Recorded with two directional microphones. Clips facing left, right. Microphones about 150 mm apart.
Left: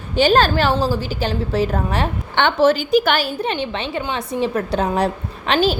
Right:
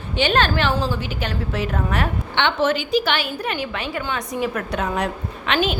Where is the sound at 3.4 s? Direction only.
30° left (ahead or behind).